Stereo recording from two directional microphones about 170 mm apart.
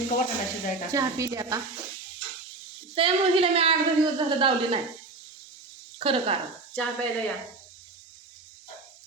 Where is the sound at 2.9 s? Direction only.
35° right (ahead or behind).